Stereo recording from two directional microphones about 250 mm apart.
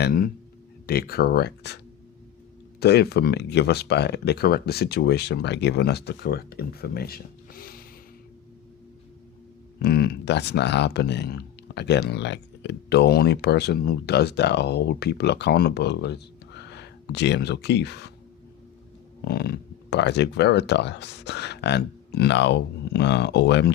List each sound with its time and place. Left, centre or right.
0.0 s speech: left
2.8 s speech: left
9.8 s speech: left
19.2 s speech: left